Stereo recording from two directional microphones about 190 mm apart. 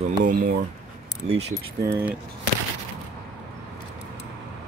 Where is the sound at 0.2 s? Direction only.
45° right (ahead or behind).